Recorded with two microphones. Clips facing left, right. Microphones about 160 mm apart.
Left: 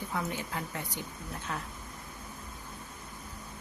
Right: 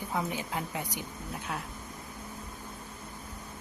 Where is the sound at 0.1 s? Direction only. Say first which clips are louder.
Right 3 dB; 15° right (ahead or behind).